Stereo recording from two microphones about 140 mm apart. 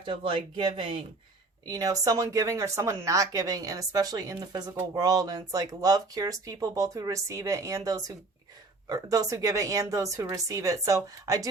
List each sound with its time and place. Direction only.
0.0 s speech: 40° right (ahead or behind)
1.6 s speech: 25° right (ahead or behind)